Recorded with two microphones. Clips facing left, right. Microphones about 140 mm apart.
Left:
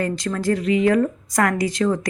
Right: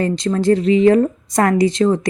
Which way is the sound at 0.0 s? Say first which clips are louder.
Right 6 dB; 25° right (ahead or behind).